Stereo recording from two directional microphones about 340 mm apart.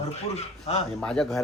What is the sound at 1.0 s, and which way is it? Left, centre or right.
Speech, centre.